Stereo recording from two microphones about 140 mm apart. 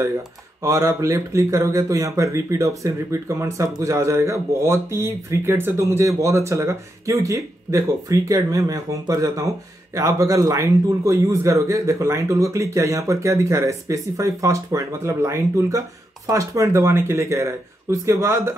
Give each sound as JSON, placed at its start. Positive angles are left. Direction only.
{"t": 0.6, "sound": "speech", "side_deg": -20}